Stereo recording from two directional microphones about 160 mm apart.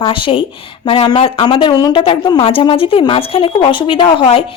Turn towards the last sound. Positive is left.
turn(degrees=35)  # may be behind; listen again after turning